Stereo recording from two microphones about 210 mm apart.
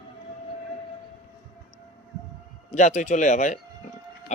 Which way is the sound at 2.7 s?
35° left (ahead or behind).